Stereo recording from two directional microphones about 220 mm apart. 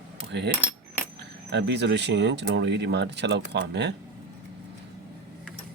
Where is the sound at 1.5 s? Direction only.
50° right (ahead or behind).